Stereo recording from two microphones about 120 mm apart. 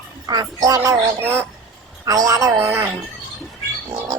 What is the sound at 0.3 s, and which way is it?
Speech, 30° right (ahead or behind).